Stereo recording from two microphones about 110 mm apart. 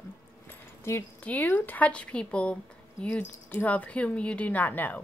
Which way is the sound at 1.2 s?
15° left (ahead or behind).